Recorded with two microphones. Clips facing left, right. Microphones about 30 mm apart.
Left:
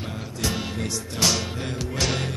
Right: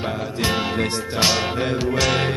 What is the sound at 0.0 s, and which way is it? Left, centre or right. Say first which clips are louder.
Music: right 6 dB; right.